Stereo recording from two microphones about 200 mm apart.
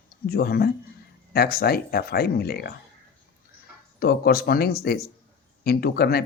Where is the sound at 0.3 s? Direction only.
50° left (ahead or behind).